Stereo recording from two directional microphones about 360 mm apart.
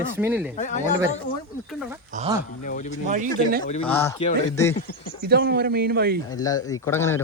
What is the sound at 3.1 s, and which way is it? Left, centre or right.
Speech, right.